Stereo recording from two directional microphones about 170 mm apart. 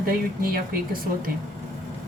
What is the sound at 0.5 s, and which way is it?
Speech, 55° right (ahead or behind).